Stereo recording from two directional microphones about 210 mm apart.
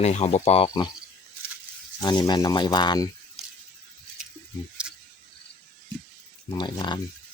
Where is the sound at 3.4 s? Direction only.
Centre (ahead or behind).